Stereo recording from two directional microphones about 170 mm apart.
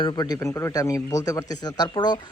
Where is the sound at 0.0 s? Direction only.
25° left (ahead or behind).